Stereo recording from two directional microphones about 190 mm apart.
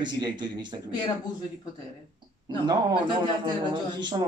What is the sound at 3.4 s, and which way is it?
Speech, 25° right (ahead or behind).